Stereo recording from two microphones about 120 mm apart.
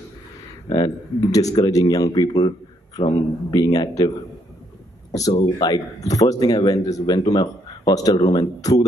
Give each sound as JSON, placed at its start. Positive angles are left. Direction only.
{"t": 0.7, "sound": "a man's voice", "side_deg": 35}
{"t": 5.6, "sound": "a man's voice", "side_deg": 30}